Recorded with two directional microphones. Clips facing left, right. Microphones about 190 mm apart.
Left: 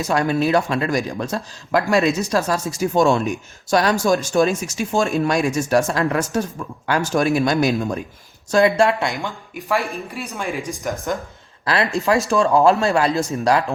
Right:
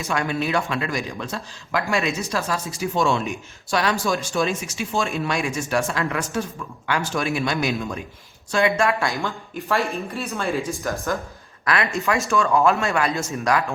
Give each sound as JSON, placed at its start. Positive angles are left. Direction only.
{"t": 0.0, "sound": "a woman's voice", "side_deg": 35}
{"t": 11.6, "sound": "speech", "side_deg": 30}